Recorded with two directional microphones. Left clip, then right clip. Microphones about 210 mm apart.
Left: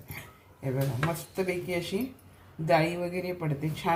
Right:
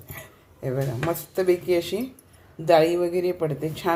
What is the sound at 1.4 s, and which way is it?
A woman's voice, 40° right (ahead or behind).